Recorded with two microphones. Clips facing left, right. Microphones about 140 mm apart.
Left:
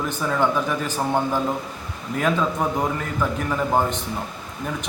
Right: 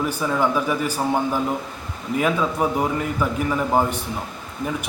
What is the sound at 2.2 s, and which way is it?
A man's voice, 10° right (ahead or behind).